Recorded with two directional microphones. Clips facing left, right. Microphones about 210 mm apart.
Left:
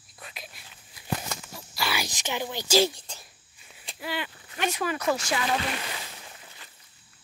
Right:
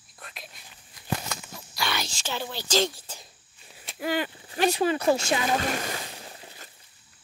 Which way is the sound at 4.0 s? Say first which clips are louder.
Right 6 dB; 45° right (ahead or behind).